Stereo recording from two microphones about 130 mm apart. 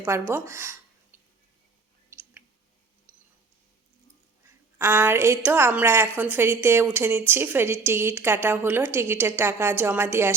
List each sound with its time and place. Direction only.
0.0 s speech: 20° right (ahead or behind)
1.1 s a sound: 15° right (ahead or behind)
3.1 s tick: 10° right (ahead or behind)
4.4 s a woman's voice: 15° right (ahead or behind)